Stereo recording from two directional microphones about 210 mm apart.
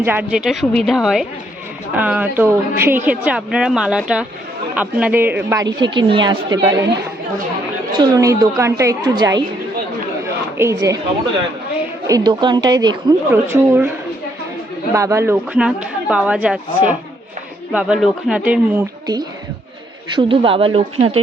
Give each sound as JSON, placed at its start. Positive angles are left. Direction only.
{"t": 0.0, "sound": "a woman's voice", "side_deg": -10}
{"t": 7.9, "sound": "a woman's voice", "side_deg": -15}
{"t": 10.6, "sound": "a woman's voice", "side_deg": -15}
{"t": 12.0, "sound": "a woman's voice", "side_deg": -20}
{"t": 14.9, "sound": "speech", "side_deg": -15}
{"t": 20.1, "sound": "a woman's voice", "side_deg": -25}